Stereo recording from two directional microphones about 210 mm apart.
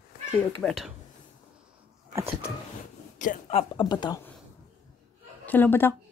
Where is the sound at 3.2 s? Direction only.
35° left (ahead or behind).